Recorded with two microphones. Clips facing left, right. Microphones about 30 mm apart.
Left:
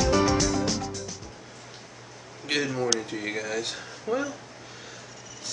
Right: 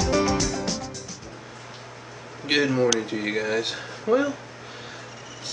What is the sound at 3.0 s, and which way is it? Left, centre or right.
Speech, right.